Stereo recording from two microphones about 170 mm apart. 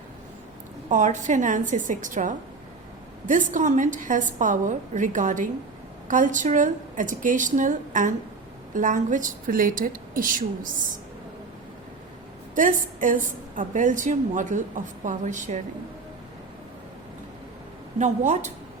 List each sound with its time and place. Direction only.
0.9 s a woman's voice: 45° right (ahead or behind)
12.5 s a woman's voice: 50° right (ahead or behind)
18.0 s a woman's voice: 45° right (ahead or behind)